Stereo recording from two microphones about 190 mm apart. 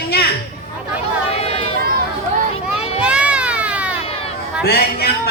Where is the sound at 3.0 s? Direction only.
5° right (ahead or behind).